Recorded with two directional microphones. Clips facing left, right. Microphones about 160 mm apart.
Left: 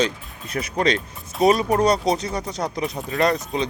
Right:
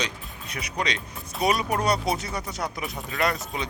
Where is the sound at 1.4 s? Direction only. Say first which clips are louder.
Left 7 dB; 25° left (ahead or behind).